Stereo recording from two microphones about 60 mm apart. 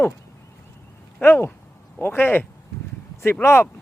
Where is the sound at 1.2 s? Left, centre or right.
Left.